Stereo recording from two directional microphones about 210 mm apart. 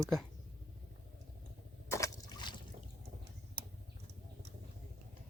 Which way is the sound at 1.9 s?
15° left (ahead or behind).